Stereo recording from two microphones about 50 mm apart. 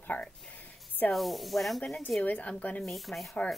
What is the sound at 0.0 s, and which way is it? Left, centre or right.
Speech, left.